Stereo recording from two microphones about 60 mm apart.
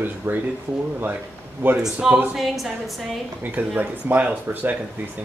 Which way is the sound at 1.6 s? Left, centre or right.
Right.